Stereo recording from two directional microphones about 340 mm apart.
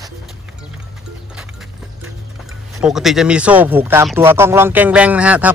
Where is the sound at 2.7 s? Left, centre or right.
Centre.